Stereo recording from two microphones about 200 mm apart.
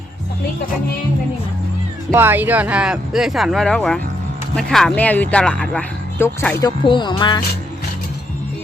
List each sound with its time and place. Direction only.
2.1 s speech: 10° right (ahead or behind); by 6.7 s 10° left (ahead or behind)
6.7 s speech: 20° left (ahead or behind)